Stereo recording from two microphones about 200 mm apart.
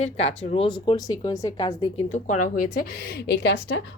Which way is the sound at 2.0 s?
35° left (ahead or behind).